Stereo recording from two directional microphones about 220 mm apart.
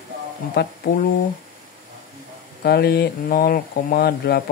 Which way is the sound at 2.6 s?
45° left (ahead or behind).